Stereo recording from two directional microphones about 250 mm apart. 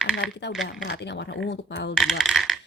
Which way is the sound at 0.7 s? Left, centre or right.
Left.